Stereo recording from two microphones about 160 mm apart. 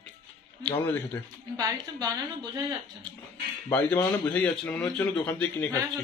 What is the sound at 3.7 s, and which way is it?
Speech, 10° left (ahead or behind).